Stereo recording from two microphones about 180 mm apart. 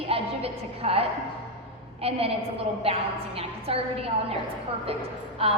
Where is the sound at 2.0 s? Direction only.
35° right (ahead or behind).